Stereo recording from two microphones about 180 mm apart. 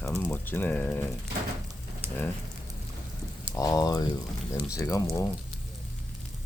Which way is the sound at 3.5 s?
20° left (ahead or behind).